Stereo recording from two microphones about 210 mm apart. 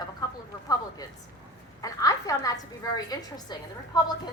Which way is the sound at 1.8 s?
15° left (ahead or behind).